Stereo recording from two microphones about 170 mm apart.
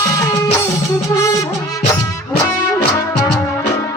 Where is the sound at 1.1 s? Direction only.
20° left (ahead or behind).